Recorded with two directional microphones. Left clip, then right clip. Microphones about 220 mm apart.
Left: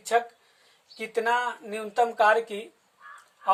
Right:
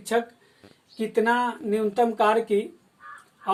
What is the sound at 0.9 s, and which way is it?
Speech, 30° left (ahead or behind).